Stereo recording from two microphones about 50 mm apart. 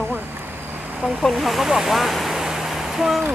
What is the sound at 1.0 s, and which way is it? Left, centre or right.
Speech, centre.